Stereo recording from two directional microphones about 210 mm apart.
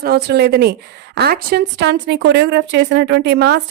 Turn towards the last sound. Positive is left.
turn(degrees=-50)  # may be behind; listen again after turning